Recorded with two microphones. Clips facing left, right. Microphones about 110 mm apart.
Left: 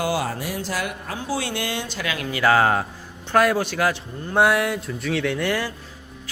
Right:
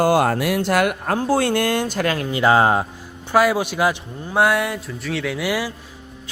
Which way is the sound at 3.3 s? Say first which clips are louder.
Right 2 dB; 10° right (ahead or behind).